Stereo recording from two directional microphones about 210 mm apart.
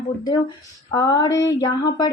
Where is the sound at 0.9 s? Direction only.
20° left (ahead or behind).